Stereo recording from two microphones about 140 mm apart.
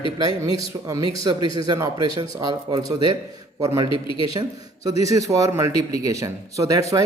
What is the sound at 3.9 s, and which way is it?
Speech, 40° left (ahead or behind).